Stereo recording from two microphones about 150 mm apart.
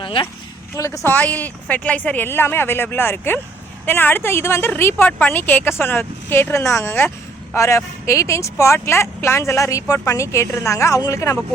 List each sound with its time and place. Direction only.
0.0 s speech: 35° left (ahead or behind)
0.8 s a woman's voice: 20° left (ahead or behind)